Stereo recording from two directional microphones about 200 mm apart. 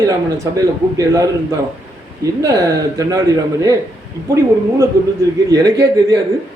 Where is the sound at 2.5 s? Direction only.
15° right (ahead or behind).